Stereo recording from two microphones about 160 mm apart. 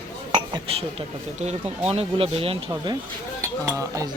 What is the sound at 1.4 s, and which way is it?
Speech, 40° right (ahead or behind).